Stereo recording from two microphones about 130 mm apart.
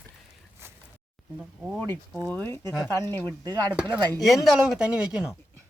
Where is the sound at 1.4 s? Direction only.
10° right (ahead or behind).